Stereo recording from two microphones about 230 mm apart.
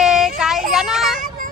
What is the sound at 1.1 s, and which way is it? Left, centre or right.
Child singing, right.